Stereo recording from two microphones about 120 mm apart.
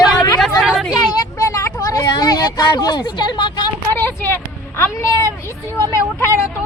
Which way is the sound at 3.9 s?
20° left (ahead or behind).